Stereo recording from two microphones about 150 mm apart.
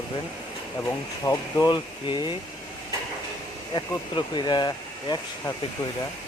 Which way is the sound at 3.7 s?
30° left (ahead or behind).